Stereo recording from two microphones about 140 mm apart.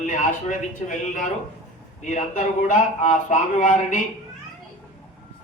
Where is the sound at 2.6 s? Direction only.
65° left (ahead or behind).